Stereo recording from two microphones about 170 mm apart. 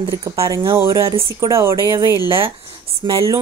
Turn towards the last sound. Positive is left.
turn(degrees=-30)  # may be behind; listen again after turning